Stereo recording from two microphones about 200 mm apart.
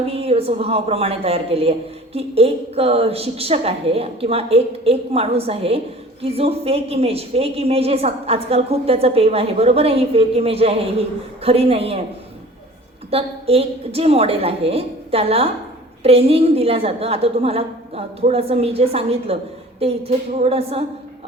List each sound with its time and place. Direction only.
0.1 s a woman's voice: 30° right (ahead or behind)
13.1 s a woman's voice: 30° right (ahead or behind)